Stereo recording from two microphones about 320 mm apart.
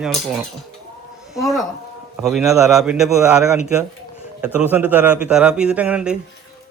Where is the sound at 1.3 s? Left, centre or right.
Centre.